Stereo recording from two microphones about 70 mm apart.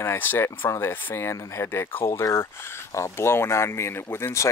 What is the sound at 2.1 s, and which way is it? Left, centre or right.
Speech, left.